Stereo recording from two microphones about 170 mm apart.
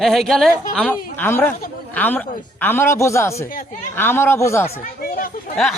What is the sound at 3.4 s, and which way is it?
Speech, 55° left (ahead or behind).